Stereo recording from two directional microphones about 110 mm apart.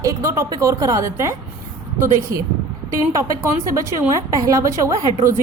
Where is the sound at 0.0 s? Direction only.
30° right (ahead or behind).